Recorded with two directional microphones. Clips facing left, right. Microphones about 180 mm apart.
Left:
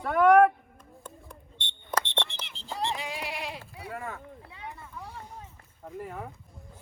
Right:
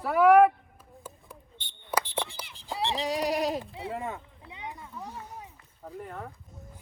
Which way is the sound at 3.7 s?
25° right (ahead or behind).